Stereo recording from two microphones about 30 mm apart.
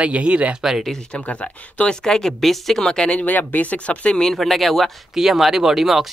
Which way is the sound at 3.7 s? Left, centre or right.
Left.